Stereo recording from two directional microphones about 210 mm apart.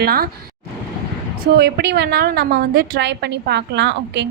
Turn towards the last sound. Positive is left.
turn(degrees=-55)  # may be behind; listen again after turning